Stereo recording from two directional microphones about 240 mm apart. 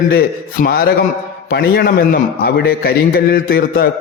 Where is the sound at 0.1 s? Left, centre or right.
Left.